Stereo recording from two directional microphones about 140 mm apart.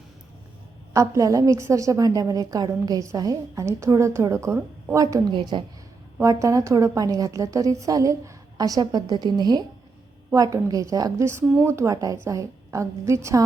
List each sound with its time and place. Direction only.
0.9 s a woman's voice: 20° right (ahead or behind)
6.1 s a woman's voice: 20° right (ahead or behind)